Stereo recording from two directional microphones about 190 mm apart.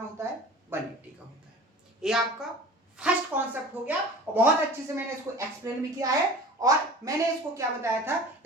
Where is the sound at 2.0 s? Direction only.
Centre (ahead or behind).